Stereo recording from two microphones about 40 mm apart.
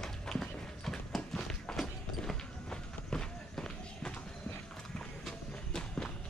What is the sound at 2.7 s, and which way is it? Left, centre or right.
Run, centre.